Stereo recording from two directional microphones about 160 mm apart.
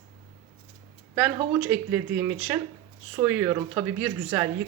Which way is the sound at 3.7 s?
5° right (ahead or behind).